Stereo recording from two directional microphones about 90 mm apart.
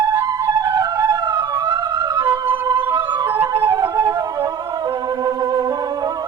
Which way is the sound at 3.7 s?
40° right (ahead or behind).